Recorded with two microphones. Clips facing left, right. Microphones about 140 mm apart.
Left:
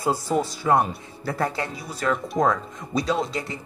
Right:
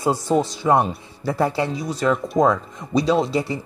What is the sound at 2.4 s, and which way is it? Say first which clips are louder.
Speech: right 4 dB; 20° right (ahead or behind).